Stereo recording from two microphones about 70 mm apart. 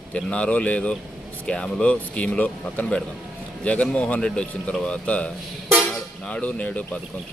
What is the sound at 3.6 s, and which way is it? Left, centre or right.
Speech, centre.